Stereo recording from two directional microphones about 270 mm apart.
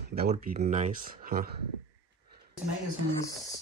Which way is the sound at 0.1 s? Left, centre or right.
Right.